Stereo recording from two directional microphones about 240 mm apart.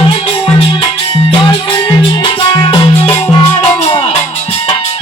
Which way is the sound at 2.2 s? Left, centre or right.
Left.